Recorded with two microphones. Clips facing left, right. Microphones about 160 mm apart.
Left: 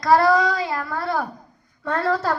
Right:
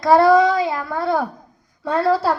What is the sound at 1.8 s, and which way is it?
Speech, 10° right (ahead or behind).